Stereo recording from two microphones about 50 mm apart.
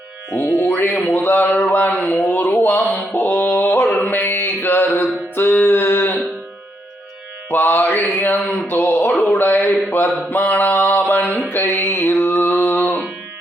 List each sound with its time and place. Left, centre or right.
0.5 s mantra: left
1.7 s a sound: left
2.4 s mantra: left
7.5 s mantra: left
8.1 s speech: left
9.1 s a sound: left
10.2 s mantra: left